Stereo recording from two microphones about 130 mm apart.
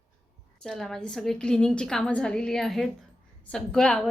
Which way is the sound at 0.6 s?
5° left (ahead or behind).